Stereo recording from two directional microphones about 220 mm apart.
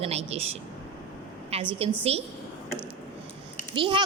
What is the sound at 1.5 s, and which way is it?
Speech, 25° right (ahead or behind).